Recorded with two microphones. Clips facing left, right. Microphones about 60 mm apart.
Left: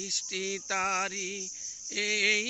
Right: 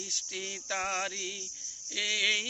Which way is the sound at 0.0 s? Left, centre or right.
Left.